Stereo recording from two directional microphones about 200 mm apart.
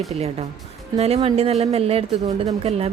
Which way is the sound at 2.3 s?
20° right (ahead or behind).